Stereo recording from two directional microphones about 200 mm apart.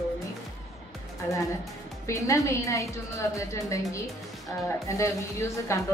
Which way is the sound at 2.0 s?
15° left (ahead or behind).